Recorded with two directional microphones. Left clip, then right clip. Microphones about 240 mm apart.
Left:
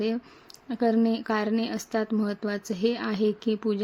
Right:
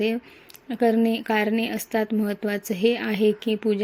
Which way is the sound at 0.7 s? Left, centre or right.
Centre.